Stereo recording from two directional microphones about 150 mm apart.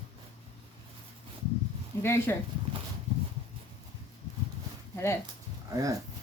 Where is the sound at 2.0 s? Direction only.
15° left (ahead or behind).